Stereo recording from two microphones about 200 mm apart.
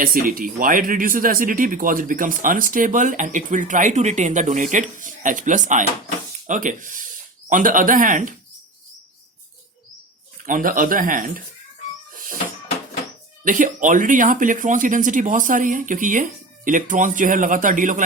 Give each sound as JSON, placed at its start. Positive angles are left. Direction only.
{"t": 0.0, "sound": "speech", "side_deg": -45}
{"t": 10.4, "sound": "speech", "side_deg": -40}
{"t": 13.4, "sound": "speech", "side_deg": -40}